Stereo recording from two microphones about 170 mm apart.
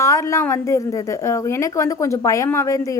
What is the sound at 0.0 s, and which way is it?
A woman's voice, 20° left (ahead or behind).